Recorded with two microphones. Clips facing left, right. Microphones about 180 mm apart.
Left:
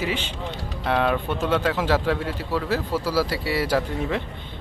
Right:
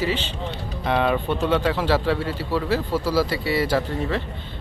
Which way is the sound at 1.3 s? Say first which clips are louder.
Right 1 dB; 10° right (ahead or behind).